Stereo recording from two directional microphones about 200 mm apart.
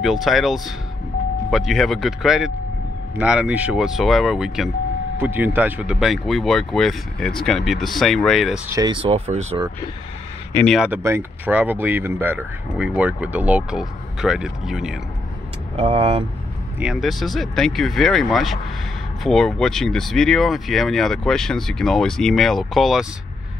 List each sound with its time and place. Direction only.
0.0 s speech: centre (ahead or behind)
8.6 s speech: 20° right (ahead or behind)
10.5 s speech: 5° left (ahead or behind)
10.9 s speech: 15° right (ahead or behind)
15.7 s speech: 30° right (ahead or behind)
16.8 s speech: centre (ahead or behind)